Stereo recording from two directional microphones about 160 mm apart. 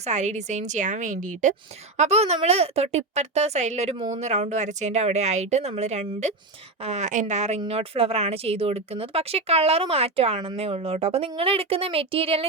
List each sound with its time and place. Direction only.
0.0 s speech: 50° right (ahead or behind)